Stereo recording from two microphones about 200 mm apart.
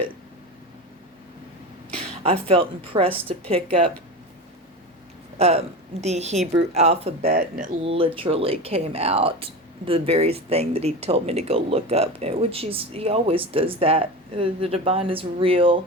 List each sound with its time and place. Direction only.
2.0 s speech: 30° right (ahead or behind)
5.4 s a woman's voice: 30° right (ahead or behind)
7.3 s speech: 45° right (ahead or behind)
7.9 s speech: 25° right (ahead or behind)